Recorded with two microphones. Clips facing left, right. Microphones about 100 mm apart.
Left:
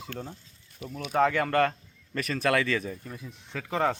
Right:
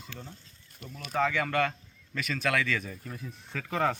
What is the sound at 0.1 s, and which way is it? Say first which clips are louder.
Speech: left 7 dB; 50° left (ahead or behind).